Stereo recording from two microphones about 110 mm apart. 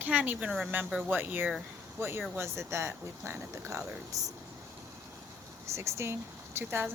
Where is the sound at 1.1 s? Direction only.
20° right (ahead or behind).